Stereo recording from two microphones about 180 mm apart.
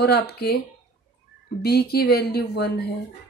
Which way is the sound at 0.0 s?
65° left (ahead or behind).